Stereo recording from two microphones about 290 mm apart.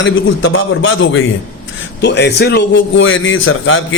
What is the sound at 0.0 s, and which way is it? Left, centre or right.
A man's voice, left.